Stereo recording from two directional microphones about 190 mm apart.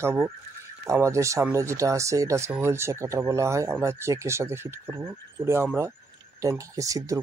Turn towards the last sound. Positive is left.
turn(degrees=-15)  # may be behind; listen again after turning